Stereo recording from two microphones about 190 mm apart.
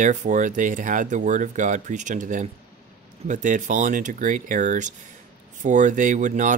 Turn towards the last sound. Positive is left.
turn(degrees=-40)  # may be behind; listen again after turning